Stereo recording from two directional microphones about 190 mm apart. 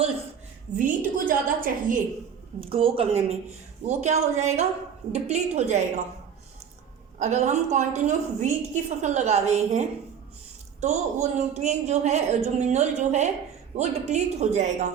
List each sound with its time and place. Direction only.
0.8 s a woman's voice: 45° right (ahead or behind)
2.6 s a woman's voice: 30° right (ahead or behind)
7.2 s a woman's voice: 40° right (ahead or behind)